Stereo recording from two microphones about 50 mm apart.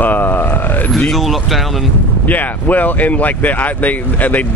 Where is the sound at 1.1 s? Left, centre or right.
Centre.